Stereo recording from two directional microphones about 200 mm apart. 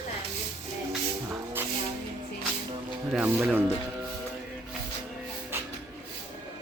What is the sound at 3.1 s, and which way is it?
Speech, 5° right (ahead or behind).